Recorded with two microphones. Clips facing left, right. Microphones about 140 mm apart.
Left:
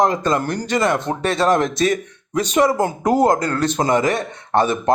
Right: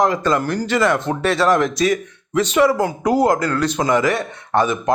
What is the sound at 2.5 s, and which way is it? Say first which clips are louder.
Speech: right 1 dB; 45° left (ahead or behind).